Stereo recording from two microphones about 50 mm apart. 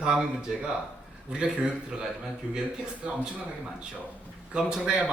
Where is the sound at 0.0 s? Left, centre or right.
Centre.